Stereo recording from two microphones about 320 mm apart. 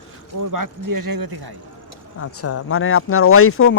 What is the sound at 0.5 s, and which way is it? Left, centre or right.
Speech, right.